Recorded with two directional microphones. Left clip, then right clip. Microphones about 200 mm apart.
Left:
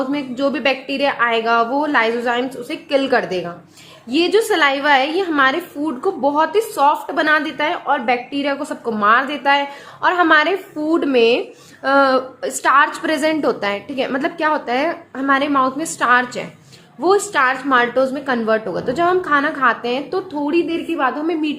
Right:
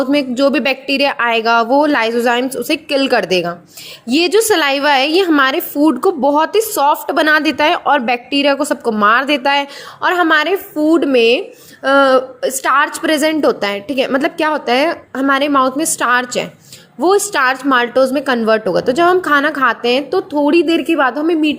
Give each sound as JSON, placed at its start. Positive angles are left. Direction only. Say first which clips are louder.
{"t": 0.0, "sound": "a woman's voice", "louder": "right 7 dB", "side_deg": -30}